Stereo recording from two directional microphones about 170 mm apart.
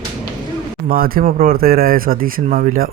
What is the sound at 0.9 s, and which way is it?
Speech, 60° right (ahead or behind).